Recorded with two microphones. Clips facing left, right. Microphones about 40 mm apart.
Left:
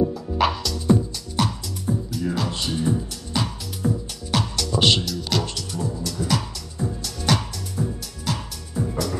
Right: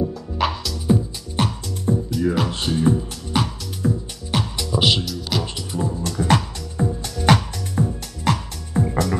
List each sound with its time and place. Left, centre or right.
0.1 s music: centre
1.3 s music: right
4.8 s music: centre
5.4 s music: right
7.8 s music: right